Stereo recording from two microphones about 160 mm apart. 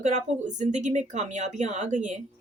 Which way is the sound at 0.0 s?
50° right (ahead or behind).